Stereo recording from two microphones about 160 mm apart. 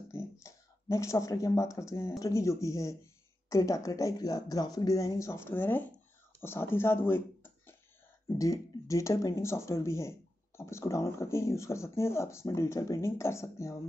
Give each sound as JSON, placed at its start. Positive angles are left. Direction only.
{"t": 0.1, "sound": "speech", "side_deg": 20}